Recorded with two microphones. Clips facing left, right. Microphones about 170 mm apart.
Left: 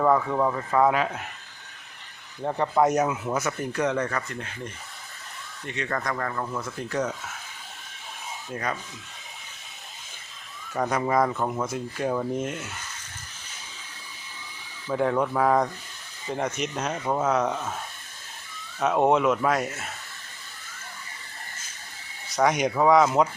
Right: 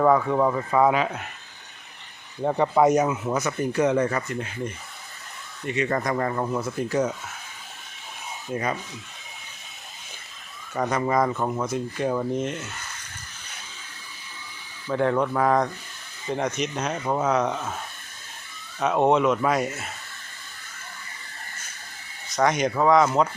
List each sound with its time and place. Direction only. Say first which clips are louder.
0.0 s speech: right 3 dB; centre (ahead or behind)
2.4 s speech: right 3 dB; 10° right (ahead or behind)
3.7 s speech: right 6 dB; 5° right (ahead or behind); by 6.6 s 25° right (ahead or behind)
6.6 s speech: right 3 dB; 10° right (ahead or behind)
10.8 s speech: right 1 dB; 5° left (ahead or behind)
14.8 s speech: right 1 dB; 5° left (ahead or behind)
18.8 s speech: right 1 dB; centre (ahead or behind)
22.3 s speech: right 1 dB; 10° left (ahead or behind)